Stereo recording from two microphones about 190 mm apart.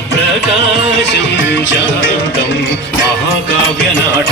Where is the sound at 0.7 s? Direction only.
65° left (ahead or behind).